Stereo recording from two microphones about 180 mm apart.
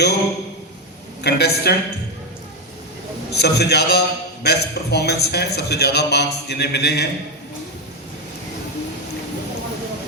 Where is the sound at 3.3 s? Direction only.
65° left (ahead or behind).